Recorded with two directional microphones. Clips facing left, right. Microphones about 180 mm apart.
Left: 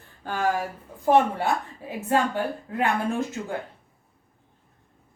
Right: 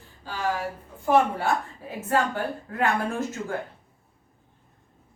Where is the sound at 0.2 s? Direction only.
55° left (ahead or behind).